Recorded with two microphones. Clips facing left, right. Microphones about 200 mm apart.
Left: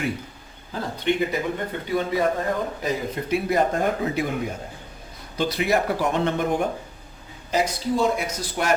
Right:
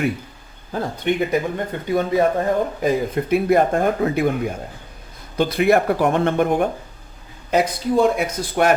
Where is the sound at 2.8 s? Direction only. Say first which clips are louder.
Right 7 dB; 55° right (ahead or behind).